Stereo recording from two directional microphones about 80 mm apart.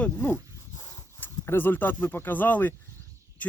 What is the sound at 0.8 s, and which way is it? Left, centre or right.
Horse, left.